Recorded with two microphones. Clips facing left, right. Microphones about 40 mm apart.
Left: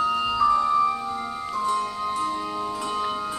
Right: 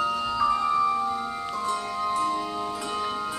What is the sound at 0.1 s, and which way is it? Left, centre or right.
Music, centre.